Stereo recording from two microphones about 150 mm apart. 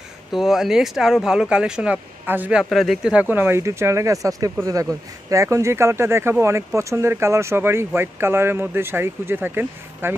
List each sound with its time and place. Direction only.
0.3 s speech: centre (ahead or behind)
2.7 s speech: centre (ahead or behind)